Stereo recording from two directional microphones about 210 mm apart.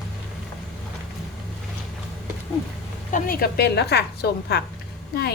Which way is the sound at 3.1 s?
45° left (ahead or behind).